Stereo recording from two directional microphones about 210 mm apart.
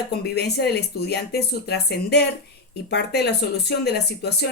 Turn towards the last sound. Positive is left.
turn(degrees=50)  # may be behind; listen again after turning